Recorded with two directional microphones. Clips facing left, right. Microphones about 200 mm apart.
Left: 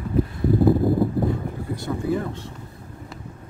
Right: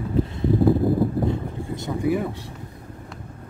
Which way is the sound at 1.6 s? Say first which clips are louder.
Right 3 dB; 20° right (ahead or behind).